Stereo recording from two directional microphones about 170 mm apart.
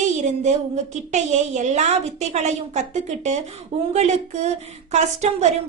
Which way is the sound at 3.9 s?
40° right (ahead or behind).